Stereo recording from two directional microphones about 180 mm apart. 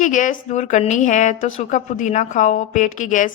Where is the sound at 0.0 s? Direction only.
45° left (ahead or behind).